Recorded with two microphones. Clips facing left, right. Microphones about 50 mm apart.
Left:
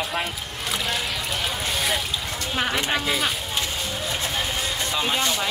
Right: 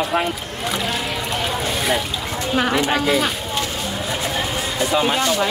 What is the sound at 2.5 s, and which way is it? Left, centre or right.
Speech, centre.